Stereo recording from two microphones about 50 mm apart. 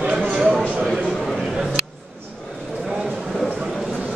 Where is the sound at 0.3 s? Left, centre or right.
Centre.